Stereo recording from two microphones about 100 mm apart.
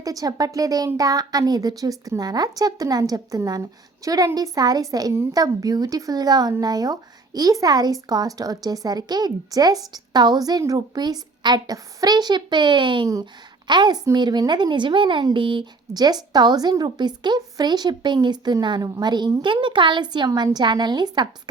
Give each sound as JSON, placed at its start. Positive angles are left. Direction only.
{"t": 0.0, "sound": "speech", "side_deg": -35}